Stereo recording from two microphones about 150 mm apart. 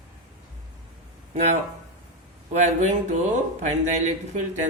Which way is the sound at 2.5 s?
50° right (ahead or behind).